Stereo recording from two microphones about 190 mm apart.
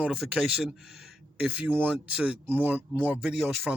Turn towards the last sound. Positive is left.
turn(degrees=-5)  # may be behind; listen again after turning